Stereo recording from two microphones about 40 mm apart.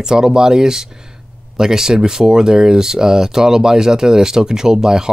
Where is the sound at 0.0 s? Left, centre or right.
Centre.